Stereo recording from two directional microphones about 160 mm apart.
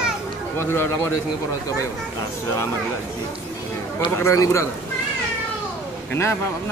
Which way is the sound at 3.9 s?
15° left (ahead or behind).